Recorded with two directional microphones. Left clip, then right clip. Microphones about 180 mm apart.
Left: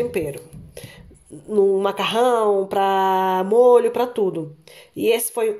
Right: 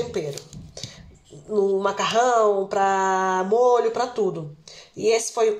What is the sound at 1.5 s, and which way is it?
Speech, 50° left (ahead or behind).